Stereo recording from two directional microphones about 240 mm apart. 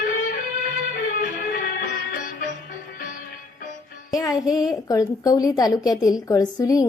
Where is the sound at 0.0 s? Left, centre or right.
Left.